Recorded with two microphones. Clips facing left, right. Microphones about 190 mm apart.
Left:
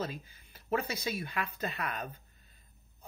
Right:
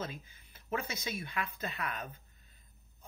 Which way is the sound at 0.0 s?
35° left (ahead or behind).